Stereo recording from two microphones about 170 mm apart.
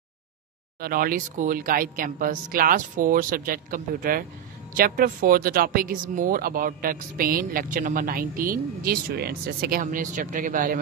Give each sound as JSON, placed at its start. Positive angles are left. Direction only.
{"t": 0.7, "sound": "speech", "side_deg": -60}